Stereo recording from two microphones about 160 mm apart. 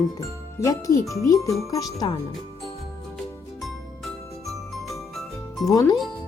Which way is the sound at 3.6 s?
Centre (ahead or behind).